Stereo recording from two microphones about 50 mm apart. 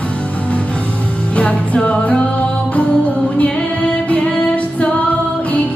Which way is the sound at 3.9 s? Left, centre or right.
Left.